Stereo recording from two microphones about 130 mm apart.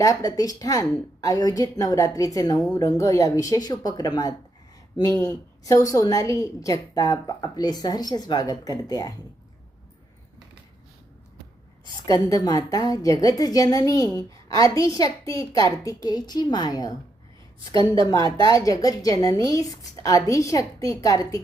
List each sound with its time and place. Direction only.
0.0 s a woman's voice: 25° left (ahead or behind)
12.2 s a woman's voice: 30° left (ahead or behind)
18.4 s a woman's voice: 25° left (ahead or behind)